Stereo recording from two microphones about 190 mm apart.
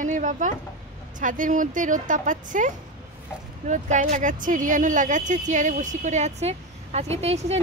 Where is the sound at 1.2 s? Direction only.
45° right (ahead or behind).